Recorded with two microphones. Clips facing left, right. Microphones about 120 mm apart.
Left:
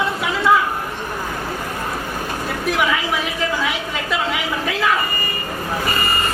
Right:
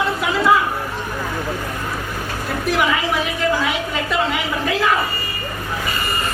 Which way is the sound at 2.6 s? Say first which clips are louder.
Right 1 dB; centre (ahead or behind).